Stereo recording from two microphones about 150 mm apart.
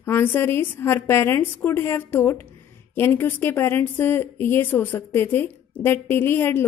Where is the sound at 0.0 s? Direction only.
15° left (ahead or behind).